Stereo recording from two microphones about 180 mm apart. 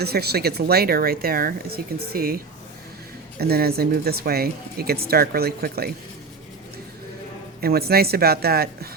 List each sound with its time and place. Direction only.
0.0 s speech: 60° right (ahead or behind)
3.4 s speech: 60° right (ahead or behind)
7.6 s speech: 60° right (ahead or behind)